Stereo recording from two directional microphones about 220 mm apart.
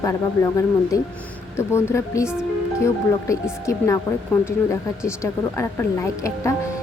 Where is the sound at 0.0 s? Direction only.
15° left (ahead or behind).